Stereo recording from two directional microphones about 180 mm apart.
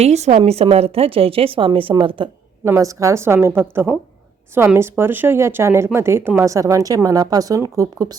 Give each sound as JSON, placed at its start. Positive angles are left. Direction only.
{"t": 0.0, "sound": "a woman's voice", "side_deg": -40}
{"t": 2.6, "sound": "speech", "side_deg": -15}